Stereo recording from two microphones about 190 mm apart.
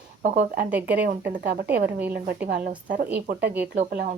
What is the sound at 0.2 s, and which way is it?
Speech, 40° right (ahead or behind).